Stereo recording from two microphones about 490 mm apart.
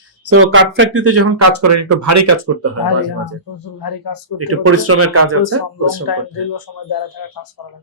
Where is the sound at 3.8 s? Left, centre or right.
Left.